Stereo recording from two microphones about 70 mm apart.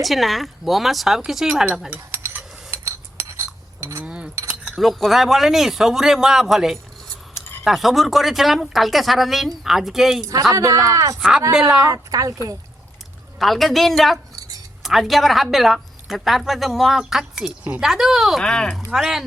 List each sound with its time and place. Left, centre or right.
0.0 s a woman's voice: centre
2.2 s a sound: right
2.6 s cutlery: right
4.0 s chink: centre
4.8 s a woman's voice: centre
10.5 s speech: right
11.2 s a woman's voice: centre
11.9 s speech: right
13.4 s a woman's voice: centre
18.4 s speech: centre
18.9 s speech: centre